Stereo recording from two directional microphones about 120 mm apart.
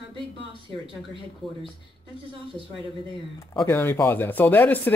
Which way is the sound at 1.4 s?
Centre (ahead or behind).